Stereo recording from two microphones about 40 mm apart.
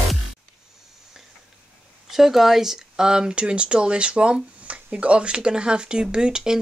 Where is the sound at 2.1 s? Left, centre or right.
Centre.